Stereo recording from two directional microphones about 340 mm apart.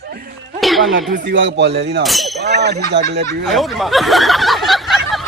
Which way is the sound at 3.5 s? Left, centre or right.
Centre.